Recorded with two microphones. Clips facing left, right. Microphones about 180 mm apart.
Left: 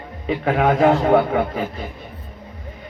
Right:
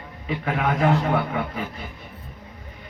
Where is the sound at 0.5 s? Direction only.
30° left (ahead or behind).